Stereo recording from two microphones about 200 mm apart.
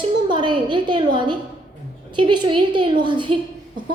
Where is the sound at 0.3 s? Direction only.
25° right (ahead or behind).